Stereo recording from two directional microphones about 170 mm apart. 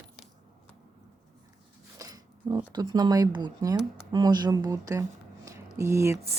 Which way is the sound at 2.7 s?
25° right (ahead or behind).